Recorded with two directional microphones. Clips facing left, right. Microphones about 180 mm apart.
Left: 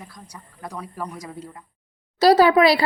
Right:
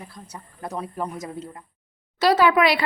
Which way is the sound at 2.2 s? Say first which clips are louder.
Left 4 dB; 35° left (ahead or behind).